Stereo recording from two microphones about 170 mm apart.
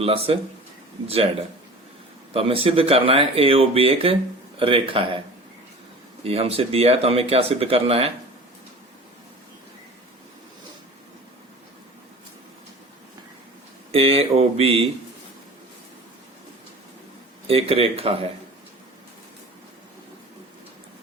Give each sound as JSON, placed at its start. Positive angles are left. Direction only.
{"t": 0.0, "sound": "speech", "side_deg": -35}
{"t": 6.2, "sound": "speech", "side_deg": -35}
{"t": 13.9, "sound": "speech", "side_deg": -35}
{"t": 17.4, "sound": "speech", "side_deg": -35}